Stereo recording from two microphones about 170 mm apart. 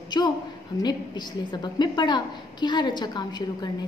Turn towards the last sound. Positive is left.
turn(degrees=25)  # may be behind; listen again after turning